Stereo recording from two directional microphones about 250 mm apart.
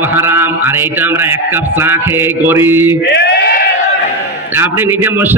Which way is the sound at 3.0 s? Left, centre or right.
Left.